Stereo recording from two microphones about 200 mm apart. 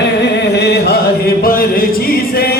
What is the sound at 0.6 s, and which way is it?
Choir, 55° left (ahead or behind).